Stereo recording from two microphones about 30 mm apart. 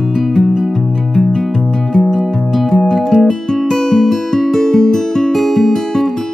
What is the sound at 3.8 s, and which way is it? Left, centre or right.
Music, centre.